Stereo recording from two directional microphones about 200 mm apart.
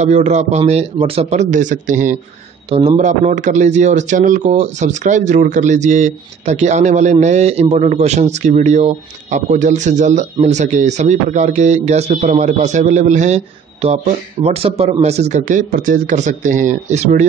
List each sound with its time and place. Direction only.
0.0 s speech: 35° right (ahead or behind)
2.7 s speech: 30° right (ahead or behind)